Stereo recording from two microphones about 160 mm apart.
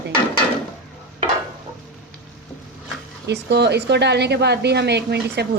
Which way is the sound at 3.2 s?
90° right.